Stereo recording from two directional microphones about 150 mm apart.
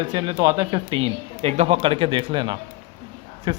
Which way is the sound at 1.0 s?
40° right (ahead or behind).